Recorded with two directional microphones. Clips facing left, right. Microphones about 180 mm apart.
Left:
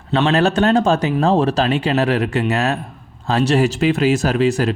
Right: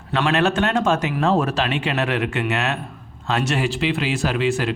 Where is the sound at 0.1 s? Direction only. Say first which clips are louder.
Left 4 dB; 30° left (ahead or behind).